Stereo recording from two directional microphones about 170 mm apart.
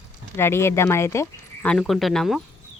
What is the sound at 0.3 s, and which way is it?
Speech, 15° left (ahead or behind).